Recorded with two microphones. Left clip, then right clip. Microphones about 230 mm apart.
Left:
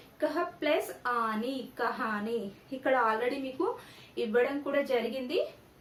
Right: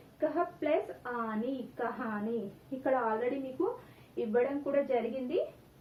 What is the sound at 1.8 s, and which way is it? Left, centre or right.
A woman's voice, left.